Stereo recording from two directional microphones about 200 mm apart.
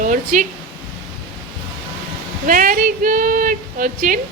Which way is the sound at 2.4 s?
45° right (ahead or behind).